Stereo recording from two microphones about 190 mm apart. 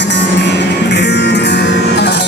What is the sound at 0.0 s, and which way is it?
Music, 65° left (ahead or behind).